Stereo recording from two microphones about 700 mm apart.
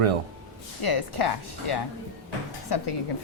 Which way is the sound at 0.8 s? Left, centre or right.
Left.